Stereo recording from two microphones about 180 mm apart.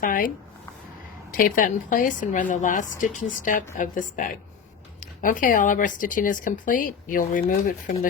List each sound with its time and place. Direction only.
0.0 s speech: 50° left (ahead or behind)
1.3 s speech: 50° left (ahead or behind)